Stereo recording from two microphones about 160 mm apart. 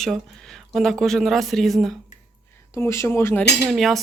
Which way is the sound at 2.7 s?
20° left (ahead or behind).